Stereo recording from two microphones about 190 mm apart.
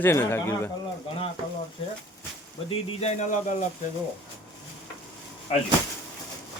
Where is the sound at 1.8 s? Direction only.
30° left (ahead or behind).